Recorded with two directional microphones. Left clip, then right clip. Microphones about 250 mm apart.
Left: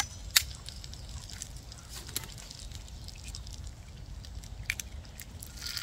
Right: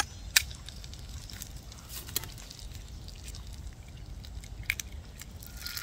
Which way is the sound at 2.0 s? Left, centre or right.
Right.